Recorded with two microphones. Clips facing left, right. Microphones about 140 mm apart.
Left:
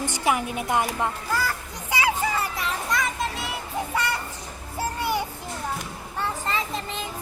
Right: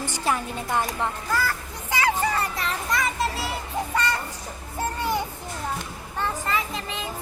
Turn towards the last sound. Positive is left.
turn(degrees=30)  # may be behind; listen again after turning